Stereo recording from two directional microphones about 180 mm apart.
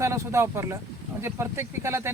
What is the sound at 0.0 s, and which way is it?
Speech, 15° right (ahead or behind).